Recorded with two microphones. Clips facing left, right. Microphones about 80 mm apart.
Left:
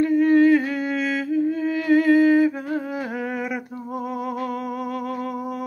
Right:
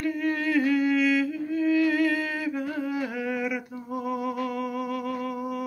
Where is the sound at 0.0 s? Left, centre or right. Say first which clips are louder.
Left 11 dB; left.